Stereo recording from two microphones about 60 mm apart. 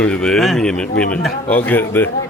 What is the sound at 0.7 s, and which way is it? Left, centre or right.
Speech, centre.